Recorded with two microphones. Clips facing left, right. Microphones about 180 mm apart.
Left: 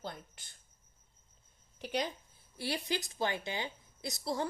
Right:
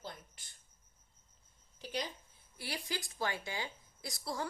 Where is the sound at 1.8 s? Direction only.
60° left (ahead or behind).